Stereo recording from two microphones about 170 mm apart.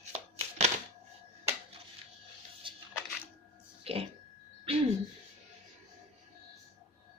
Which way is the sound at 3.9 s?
35° right (ahead or behind).